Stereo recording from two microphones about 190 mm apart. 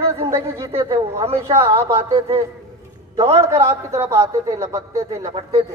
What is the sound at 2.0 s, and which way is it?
A man's voice, 30° right (ahead or behind).